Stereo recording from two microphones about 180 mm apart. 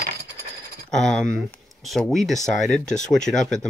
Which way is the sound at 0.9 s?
5° left (ahead or behind).